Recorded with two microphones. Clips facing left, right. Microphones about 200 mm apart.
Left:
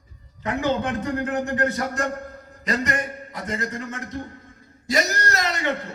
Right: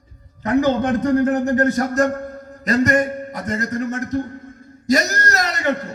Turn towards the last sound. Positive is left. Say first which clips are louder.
# right 3 dB
turn(degrees=-40)  # may be behind; listen again after turning